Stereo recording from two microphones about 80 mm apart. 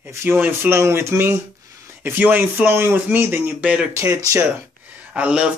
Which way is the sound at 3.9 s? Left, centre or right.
Right.